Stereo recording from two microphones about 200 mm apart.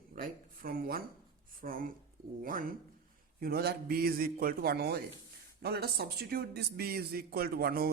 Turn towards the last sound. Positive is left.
turn(degrees=-50)  # may be behind; listen again after turning